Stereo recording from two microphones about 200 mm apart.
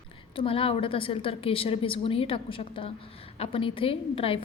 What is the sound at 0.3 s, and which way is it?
A woman's voice, 25° left (ahead or behind).